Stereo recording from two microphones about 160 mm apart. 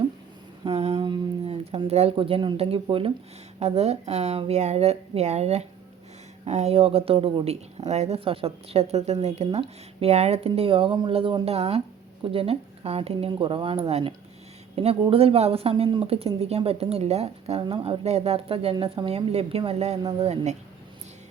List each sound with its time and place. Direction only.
0.6 s speech: 40° right (ahead or behind)